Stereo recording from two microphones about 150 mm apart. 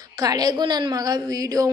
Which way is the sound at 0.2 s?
25° right (ahead or behind).